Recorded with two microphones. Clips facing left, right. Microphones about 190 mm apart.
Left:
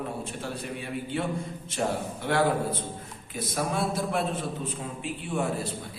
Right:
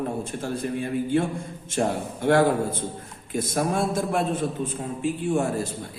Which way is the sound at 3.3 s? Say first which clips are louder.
Right 5 dB; 50° right (ahead or behind).